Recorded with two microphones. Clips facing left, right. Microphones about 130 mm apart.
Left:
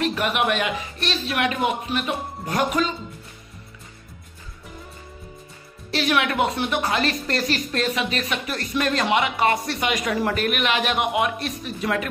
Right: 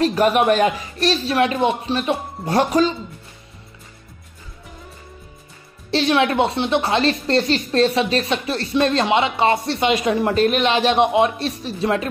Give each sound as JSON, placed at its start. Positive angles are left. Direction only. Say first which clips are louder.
{"t": 0.0, "sound": "speech", "louder": "right 7 dB", "side_deg": -40}
{"t": 5.9, "sound": "speech", "louder": "right 5 dB", "side_deg": -30}